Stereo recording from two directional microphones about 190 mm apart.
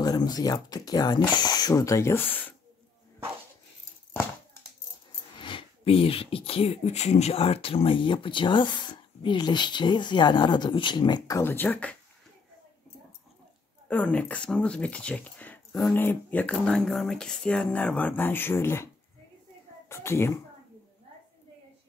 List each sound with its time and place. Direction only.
0.0 s speech: 20° left (ahead or behind)
5.4 s speech: 25° left (ahead or behind); by 12.0 s 10° left (ahead or behind)
13.8 s speech: 5° left (ahead or behind)
19.9 s speech: 15° left (ahead or behind)